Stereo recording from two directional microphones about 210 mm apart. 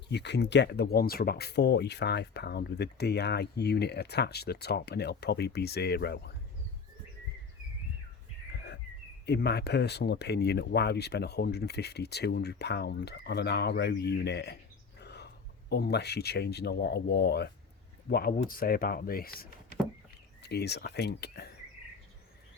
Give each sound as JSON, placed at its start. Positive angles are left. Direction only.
{"t": 0.1, "sound": "speech", "side_deg": 55}
{"t": 9.2, "sound": "speech", "side_deg": 50}